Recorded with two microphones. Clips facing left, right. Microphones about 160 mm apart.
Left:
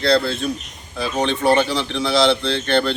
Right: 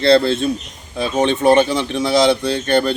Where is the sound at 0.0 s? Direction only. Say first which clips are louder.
Right 5 dB; 25° right (ahead or behind).